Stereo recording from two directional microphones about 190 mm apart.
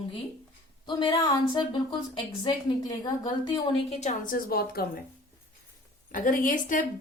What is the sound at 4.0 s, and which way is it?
Speech, 40° left (ahead or behind).